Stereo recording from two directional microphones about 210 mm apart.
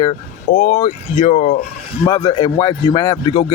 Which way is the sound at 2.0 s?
20° left (ahead or behind).